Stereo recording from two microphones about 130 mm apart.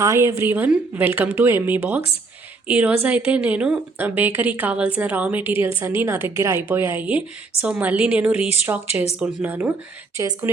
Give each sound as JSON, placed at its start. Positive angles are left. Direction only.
{"t": 0.0, "sound": "a woman's voice", "side_deg": -25}
{"t": 10.2, "sound": "a woman's voice", "side_deg": -25}